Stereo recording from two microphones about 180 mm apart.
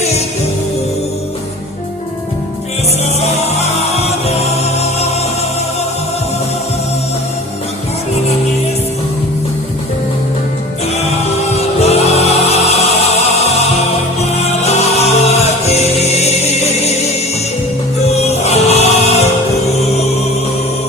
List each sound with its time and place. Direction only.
3.2 s music: 35° left (ahead or behind)
11.8 s music: 35° left (ahead or behind)
14.2 s music: 35° left (ahead or behind)
18.2 s music: 35° left (ahead or behind)